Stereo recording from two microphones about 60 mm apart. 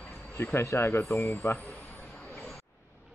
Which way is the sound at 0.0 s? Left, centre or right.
Left.